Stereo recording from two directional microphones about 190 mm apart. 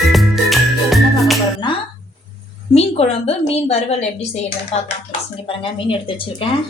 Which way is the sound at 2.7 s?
30° left (ahead or behind).